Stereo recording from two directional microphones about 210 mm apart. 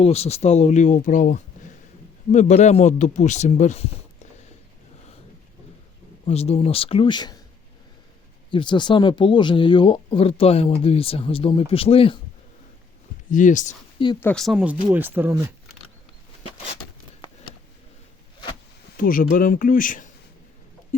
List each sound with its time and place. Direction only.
0.0 s speech: 30° left (ahead or behind)
6.2 s speech: 30° left (ahead or behind)
8.4 s speech: 25° left (ahead or behind)
13.3 s speech: 35° left (ahead or behind)
14.2 s speech: 5° left (ahead or behind)
18.9 s speech: 40° left (ahead or behind)